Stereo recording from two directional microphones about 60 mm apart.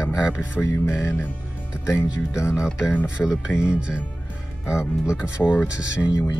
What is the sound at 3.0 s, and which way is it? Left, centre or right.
Speech, centre.